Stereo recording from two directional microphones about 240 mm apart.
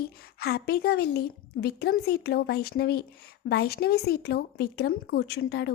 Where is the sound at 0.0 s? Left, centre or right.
Left.